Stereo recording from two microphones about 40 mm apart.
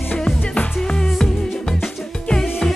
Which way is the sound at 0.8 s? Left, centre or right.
Centre.